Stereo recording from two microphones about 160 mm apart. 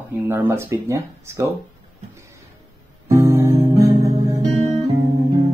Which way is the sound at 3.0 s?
20° right (ahead or behind).